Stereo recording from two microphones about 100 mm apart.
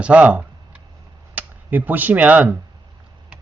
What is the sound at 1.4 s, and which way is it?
Speech, 15° right (ahead or behind).